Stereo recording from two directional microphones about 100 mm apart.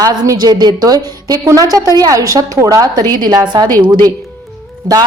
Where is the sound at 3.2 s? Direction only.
45° right (ahead or behind).